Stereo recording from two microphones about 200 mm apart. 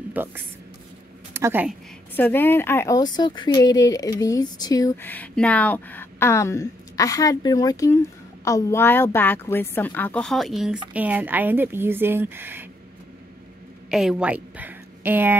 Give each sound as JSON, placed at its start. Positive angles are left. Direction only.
{"t": 0.1, "sound": "speech", "side_deg": -10}
{"t": 2.1, "sound": "a woman's voice", "side_deg": 10}
{"t": 13.8, "sound": "a woman's voice", "side_deg": -5}